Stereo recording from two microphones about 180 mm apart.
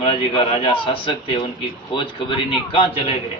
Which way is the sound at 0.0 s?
30° left (ahead or behind).